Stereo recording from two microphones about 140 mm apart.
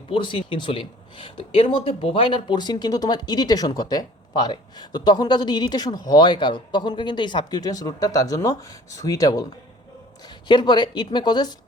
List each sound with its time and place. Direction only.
0.1 s speech: 35° left (ahead or behind)
10.5 s a woman's voice: 30° left (ahead or behind)